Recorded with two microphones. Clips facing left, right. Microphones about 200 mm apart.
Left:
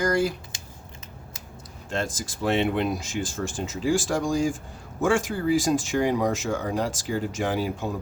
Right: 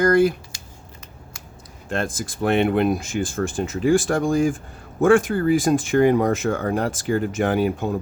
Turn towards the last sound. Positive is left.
turn(degrees=-55)  # may be behind; listen again after turning